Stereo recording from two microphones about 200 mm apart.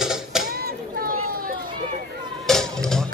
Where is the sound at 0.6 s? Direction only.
50° right (ahead or behind).